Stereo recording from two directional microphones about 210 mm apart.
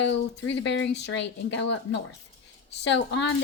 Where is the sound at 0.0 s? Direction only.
55° left (ahead or behind).